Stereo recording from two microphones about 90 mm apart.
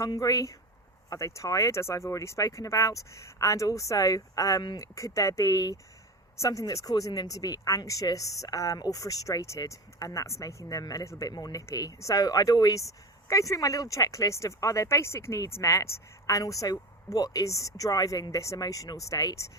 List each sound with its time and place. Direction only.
0.0 s speech: 40° left (ahead or behind)